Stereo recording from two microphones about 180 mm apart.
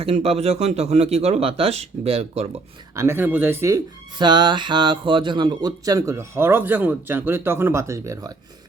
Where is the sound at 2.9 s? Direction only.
15° right (ahead or behind).